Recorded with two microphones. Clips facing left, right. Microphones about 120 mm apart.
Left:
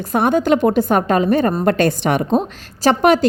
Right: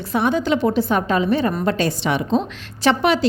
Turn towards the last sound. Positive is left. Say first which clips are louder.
# left 4 dB
turn(degrees=45)  # may be behind; listen again after turning